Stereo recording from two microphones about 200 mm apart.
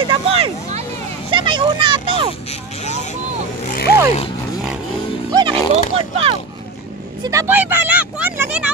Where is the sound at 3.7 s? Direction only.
50° left (ahead or behind).